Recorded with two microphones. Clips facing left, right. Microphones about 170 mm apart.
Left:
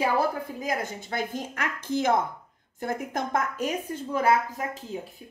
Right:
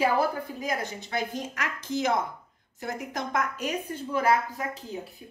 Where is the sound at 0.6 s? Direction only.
50° left (ahead or behind).